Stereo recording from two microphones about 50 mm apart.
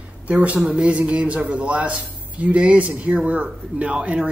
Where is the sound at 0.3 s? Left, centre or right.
Right.